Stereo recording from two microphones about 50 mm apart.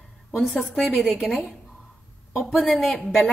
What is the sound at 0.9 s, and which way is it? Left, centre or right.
Speech, left.